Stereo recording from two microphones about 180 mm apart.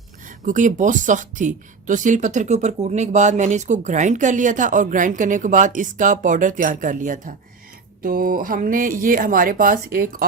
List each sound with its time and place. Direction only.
0.3 s speech: 45° right (ahead or behind)